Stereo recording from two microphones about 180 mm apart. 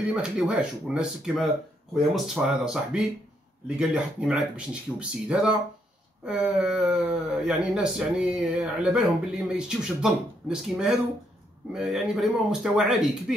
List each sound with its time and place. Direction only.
0.1 s speech: 5° right (ahead or behind)